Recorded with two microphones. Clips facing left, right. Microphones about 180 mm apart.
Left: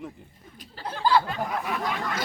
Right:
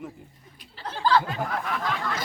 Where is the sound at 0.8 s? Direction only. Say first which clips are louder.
Left 1 dB; 40° left (ahead or behind).